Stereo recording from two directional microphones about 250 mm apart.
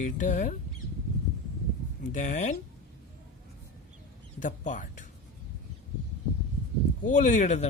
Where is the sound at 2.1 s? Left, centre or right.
Left.